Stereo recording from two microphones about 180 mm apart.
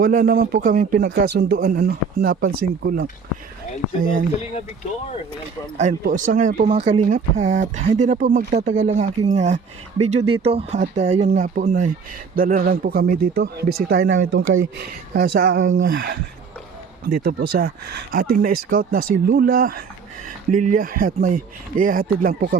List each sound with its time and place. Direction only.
0.0 s speech: 55° right (ahead or behind)
1.1 s speech: 60° right (ahead or behind)
5.7 s speech: 45° right (ahead or behind)
6.7 s speech: 35° right (ahead or behind); by 14.2 s 55° right (ahead or behind)
14.2 s speech: 90° right
15.1 s speech: 55° right (ahead or behind)
15.5 s speech: 90° right
17.1 s speech: 55° right (ahead or behind)